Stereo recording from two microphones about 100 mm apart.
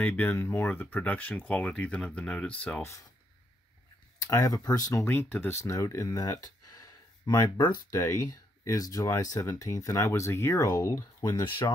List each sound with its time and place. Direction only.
0.0 s speech: 15° left (ahead or behind)
2.8 s speech: 30° left (ahead or behind)
4.2 s speech: 35° left (ahead or behind)
5.0 s speech: 20° left (ahead or behind); by 7.8 s 45° left (ahead or behind)
7.9 s speech: 35° left (ahead or behind)